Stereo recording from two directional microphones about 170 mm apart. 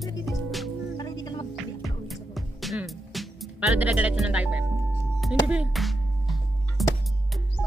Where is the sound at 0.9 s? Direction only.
20° left (ahead or behind).